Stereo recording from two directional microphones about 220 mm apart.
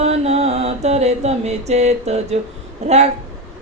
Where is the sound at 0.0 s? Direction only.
30° right (ahead or behind).